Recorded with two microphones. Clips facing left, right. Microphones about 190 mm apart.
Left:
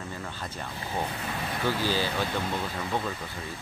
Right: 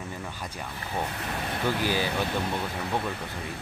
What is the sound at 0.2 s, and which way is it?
Speech, 10° right (ahead or behind).